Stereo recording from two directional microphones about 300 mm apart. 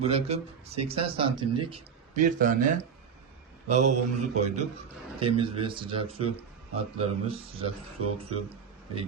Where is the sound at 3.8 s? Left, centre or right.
Right.